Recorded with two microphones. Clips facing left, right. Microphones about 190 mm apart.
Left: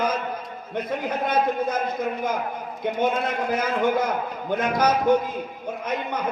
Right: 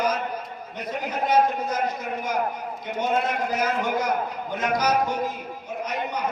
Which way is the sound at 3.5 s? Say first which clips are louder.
Left 5 dB; 55° left (ahead or behind).